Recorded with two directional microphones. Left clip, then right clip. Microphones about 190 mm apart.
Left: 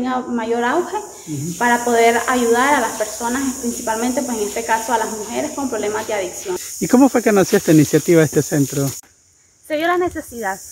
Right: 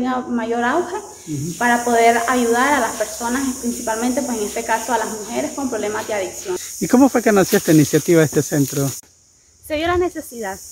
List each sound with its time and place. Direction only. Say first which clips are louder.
0.0 s speech: even; 5° left (ahead or behind)
9.7 s speech: left 1 dB; 25° right (ahead or behind)